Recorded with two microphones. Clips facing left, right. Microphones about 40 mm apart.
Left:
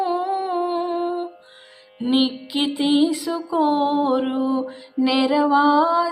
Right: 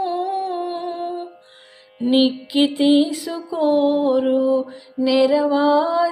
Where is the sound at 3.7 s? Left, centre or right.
Left.